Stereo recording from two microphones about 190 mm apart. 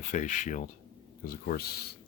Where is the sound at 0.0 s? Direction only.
40° left (ahead or behind).